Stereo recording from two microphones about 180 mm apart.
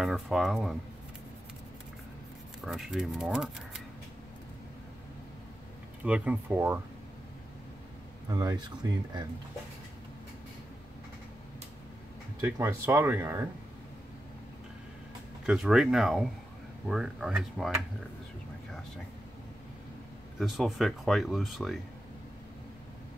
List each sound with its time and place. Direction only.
0.0 s speech: centre (ahead or behind)
2.6 s speech: centre (ahead or behind)
6.0 s speech: 5° right (ahead or behind)
8.3 s speech: 20° right (ahead or behind)
12.5 s speech: 15° right (ahead or behind)
15.4 s speech: 5° right (ahead or behind)
20.3 s speech: centre (ahead or behind)